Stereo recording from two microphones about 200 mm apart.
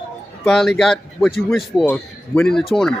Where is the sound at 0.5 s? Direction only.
Centre (ahead or behind).